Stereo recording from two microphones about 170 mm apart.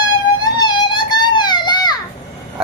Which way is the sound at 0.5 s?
25° left (ahead or behind).